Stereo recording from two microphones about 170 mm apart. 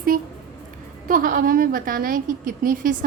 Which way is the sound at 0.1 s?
55° right (ahead or behind).